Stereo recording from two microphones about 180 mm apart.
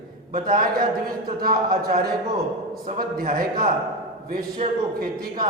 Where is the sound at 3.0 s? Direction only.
50° right (ahead or behind).